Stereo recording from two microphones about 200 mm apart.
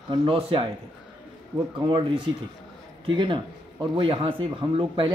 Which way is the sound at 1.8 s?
25° right (ahead or behind).